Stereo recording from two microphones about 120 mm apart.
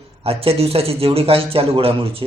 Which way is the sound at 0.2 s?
55° right (ahead or behind).